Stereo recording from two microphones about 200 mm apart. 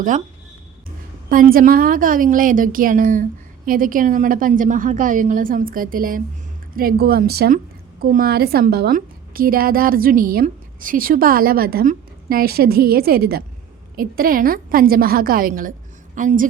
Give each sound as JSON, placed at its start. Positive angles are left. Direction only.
{"t": 1.3, "sound": "a woman's voice", "side_deg": -45}